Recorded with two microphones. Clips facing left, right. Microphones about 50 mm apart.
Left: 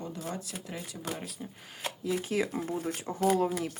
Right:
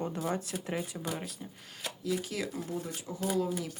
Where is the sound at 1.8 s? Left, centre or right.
Left.